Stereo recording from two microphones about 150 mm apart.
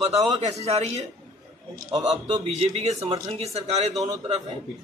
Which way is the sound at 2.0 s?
45° right (ahead or behind).